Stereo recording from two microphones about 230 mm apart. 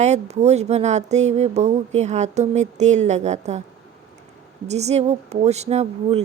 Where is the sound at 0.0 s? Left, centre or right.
Right.